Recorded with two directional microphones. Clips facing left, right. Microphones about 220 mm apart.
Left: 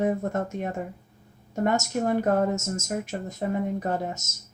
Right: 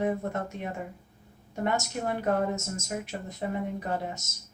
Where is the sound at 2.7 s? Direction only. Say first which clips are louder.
Left 4 dB; 45° left (ahead or behind).